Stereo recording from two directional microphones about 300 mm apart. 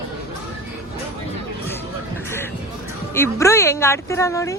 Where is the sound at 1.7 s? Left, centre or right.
Centre.